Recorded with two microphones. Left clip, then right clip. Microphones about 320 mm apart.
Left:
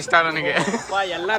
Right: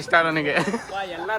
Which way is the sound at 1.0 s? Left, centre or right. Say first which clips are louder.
Left 5 dB; left.